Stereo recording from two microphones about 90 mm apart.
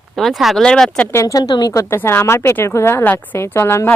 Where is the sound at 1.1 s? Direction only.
35° left (ahead or behind).